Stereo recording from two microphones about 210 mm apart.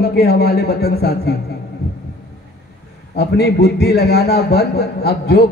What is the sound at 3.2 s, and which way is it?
A man's voice, 50° left (ahead or behind).